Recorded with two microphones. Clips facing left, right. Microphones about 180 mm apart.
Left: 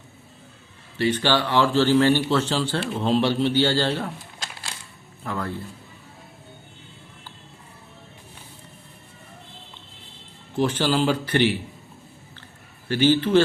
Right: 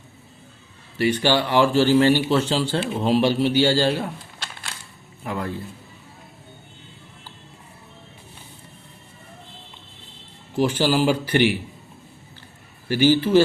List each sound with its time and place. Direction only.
0.9 s speech: 10° right (ahead or behind)
5.2 s a man's voice: 15° right (ahead or behind)
10.6 s speech: 10° right (ahead or behind)
12.9 s speech: 10° right (ahead or behind)